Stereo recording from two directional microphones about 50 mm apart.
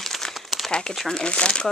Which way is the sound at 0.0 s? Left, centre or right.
Centre.